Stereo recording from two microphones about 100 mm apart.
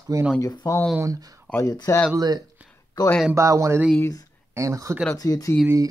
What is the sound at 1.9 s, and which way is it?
Speech, 30° left (ahead or behind).